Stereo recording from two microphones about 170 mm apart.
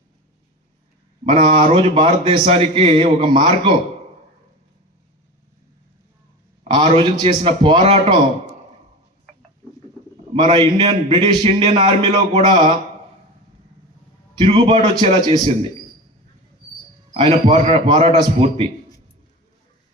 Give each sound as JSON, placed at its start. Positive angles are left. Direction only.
{"t": 1.2, "sound": "a man's voice", "side_deg": -30}
{"t": 6.7, "sound": "a man's voice", "side_deg": -25}
{"t": 10.3, "sound": "a man's voice", "side_deg": -30}
{"t": 14.3, "sound": "a man's voice", "side_deg": -30}
{"t": 17.2, "sound": "a man's voice", "side_deg": -35}